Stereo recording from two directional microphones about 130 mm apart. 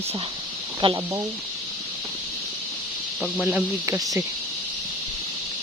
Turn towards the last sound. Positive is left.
turn(degrees=-25)  # may be behind; listen again after turning